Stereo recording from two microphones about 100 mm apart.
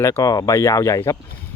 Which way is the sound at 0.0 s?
30° left (ahead or behind).